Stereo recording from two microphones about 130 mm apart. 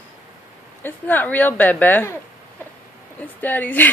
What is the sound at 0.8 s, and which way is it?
A woman's voice, 15° left (ahead or behind).